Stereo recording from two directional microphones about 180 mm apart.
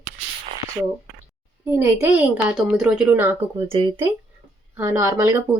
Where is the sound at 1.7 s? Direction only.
15° right (ahead or behind).